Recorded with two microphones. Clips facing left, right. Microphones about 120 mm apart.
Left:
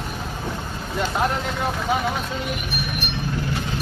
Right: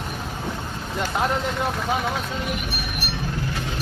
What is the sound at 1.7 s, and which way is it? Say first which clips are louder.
Speech: left 1 dB; centre (ahead or behind).